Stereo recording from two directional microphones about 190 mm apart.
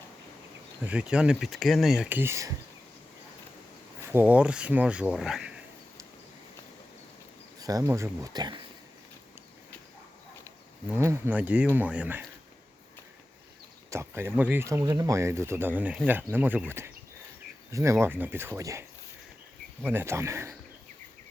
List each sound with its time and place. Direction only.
0.9 s speech: 5° right (ahead or behind)
4.0 s speech: 10° right (ahead or behind)
7.6 s speech: 20° right (ahead or behind)
10.8 s speech: 10° right (ahead or behind)
13.9 s speech: 15° right (ahead or behind)
19.9 s speech: 10° right (ahead or behind)